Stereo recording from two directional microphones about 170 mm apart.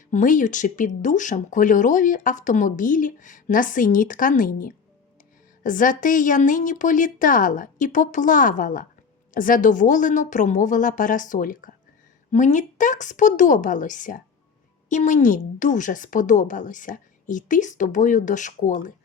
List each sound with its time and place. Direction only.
0.1 s speech: 50° left (ahead or behind)